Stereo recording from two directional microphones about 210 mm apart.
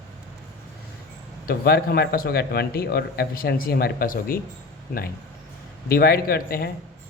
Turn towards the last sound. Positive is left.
turn(degrees=45)  # may be behind; listen again after turning